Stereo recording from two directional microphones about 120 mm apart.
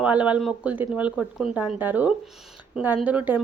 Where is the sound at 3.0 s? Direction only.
15° right (ahead or behind).